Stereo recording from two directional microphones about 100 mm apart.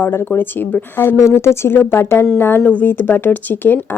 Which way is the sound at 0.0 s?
20° left (ahead or behind).